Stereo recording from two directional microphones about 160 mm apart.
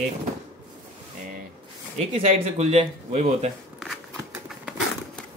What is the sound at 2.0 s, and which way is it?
Speech, 45° right (ahead or behind).